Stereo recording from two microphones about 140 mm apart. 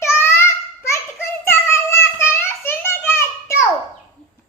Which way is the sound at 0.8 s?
20° left (ahead or behind).